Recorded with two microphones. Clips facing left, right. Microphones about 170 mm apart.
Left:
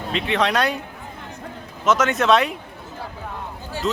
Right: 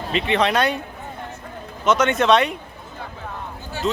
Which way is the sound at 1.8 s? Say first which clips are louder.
Right 1 dB; centre (ahead or behind).